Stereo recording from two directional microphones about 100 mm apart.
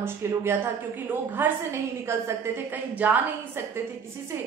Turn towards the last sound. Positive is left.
turn(degrees=-15)  # may be behind; listen again after turning